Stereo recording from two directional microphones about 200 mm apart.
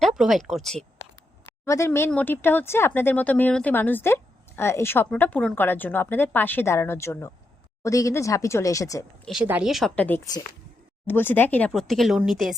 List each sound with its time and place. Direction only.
0.0 s speech: centre (ahead or behind)
1.5 s speech: 15° left (ahead or behind)
9.2 s speech: 5° right (ahead or behind)